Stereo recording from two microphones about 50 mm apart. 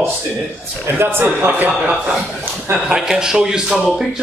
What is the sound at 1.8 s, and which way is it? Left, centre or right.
A man's voice, centre.